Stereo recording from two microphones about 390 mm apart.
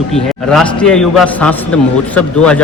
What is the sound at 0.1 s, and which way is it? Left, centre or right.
A man's voice, centre.